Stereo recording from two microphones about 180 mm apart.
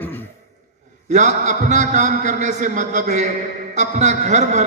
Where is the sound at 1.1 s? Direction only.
40° right (ahead or behind).